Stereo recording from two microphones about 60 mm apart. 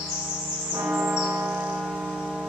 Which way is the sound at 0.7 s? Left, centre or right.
Right.